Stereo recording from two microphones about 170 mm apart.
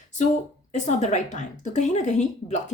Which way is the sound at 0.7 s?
45° left (ahead or behind).